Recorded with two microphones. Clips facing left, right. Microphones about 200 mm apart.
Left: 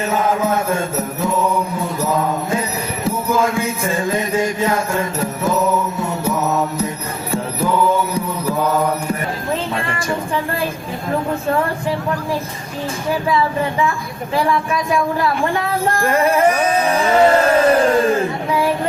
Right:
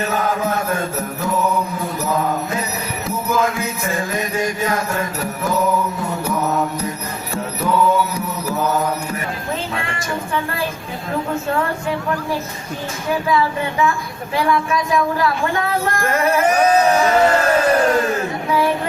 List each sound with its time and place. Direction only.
0.1 s mantra: 25° left (ahead or behind)
1.8 s music: 30° left (ahead or behind)
7.6 s music: 30° left (ahead or behind)
14.3 s music: 30° left (ahead or behind)